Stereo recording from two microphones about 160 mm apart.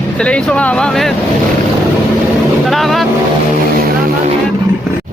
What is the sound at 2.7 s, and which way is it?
Speech, centre (ahead or behind).